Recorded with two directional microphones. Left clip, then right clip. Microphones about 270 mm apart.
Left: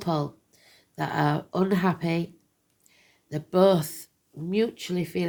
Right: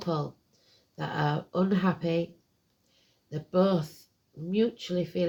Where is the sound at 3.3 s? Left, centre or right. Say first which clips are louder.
Left 6 dB; left.